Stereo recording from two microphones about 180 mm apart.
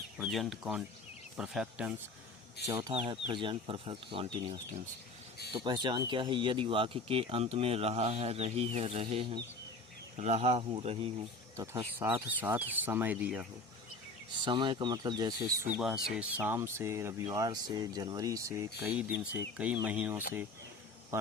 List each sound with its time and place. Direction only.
0.2 s speech: centre (ahead or behind)
2.6 s speech: 20° right (ahead or behind)
2.9 s speech: 35° right (ahead or behind)
11.5 s speech: 15° right (ahead or behind)
14.4 s speech: 25° right (ahead or behind)
15.7 s speech: 5° right (ahead or behind)